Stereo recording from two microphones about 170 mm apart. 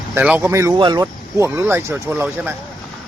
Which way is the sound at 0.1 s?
10° right (ahead or behind).